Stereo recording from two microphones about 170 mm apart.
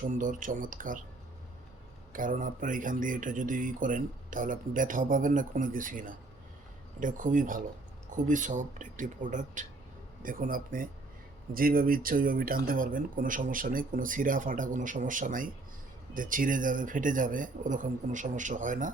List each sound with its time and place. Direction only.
0.2 s speech: 50° right (ahead or behind)
2.1 s speech: 50° right (ahead or behind)